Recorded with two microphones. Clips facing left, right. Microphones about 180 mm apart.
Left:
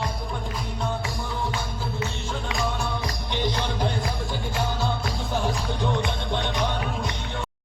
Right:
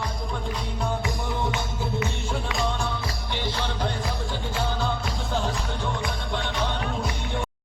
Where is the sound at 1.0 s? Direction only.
20° right (ahead or behind).